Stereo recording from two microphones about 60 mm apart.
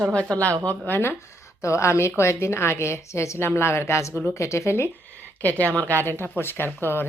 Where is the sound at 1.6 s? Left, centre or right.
Left.